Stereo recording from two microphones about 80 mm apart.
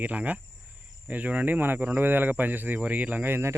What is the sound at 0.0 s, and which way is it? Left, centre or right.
Speech, centre.